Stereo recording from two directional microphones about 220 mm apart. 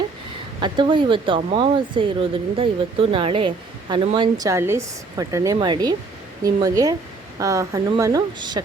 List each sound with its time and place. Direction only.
0.6 s a woman's voice: 20° right (ahead or behind)